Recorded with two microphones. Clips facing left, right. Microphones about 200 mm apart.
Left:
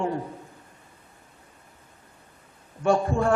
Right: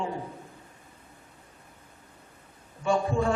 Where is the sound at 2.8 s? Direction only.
60° left (ahead or behind).